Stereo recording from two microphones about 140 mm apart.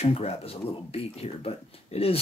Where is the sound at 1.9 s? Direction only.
45° left (ahead or behind).